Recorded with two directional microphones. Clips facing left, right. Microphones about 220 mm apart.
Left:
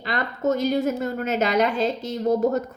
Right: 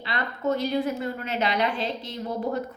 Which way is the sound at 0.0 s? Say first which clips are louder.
Left 4 dB; 45° left (ahead or behind).